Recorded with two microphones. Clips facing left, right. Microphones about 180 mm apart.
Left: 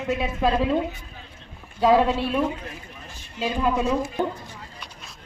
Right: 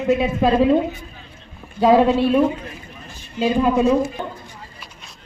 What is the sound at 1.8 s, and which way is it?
Speech, 15° right (ahead or behind).